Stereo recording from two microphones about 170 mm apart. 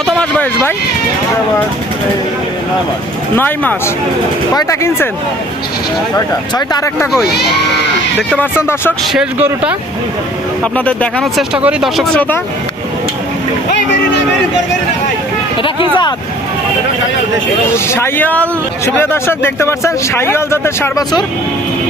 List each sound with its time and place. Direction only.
0.0 s a sound: 5° left (ahead or behind)
3.3 s speech: 10° left (ahead or behind)
6.7 s speech: 20° left (ahead or behind)
8.3 s speech: 10° left (ahead or behind)
9.1 s speech: 10° right (ahead or behind)
10.6 s speech: 5° left (ahead or behind)
17.8 s speech: 15° left (ahead or behind)